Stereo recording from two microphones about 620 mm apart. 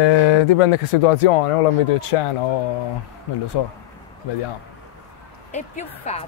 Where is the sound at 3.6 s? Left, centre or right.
Left.